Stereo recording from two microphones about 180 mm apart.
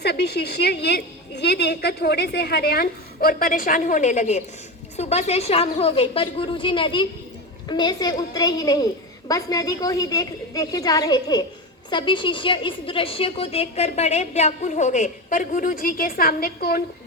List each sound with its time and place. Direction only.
0.0 s a woman's voice: 65° left (ahead or behind)